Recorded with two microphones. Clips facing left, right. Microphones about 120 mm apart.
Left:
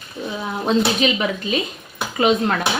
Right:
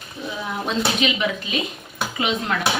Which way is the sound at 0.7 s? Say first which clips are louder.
Left 5 dB; 40° left (ahead or behind).